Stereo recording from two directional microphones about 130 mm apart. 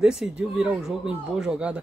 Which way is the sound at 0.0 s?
5° right (ahead or behind).